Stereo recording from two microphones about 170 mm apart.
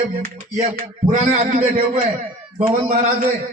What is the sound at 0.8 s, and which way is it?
A man's voice, 45° right (ahead or behind).